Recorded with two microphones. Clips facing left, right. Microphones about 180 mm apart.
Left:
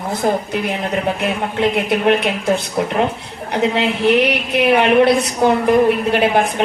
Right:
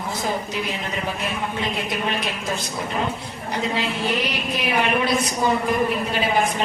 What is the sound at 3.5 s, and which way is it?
A woman's voice, 65° left (ahead or behind).